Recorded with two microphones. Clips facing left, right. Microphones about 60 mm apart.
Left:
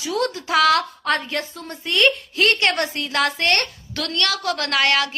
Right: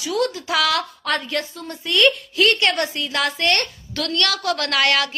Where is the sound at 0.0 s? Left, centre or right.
Left.